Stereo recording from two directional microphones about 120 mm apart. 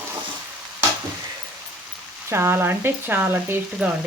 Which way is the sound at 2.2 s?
20° right (ahead or behind).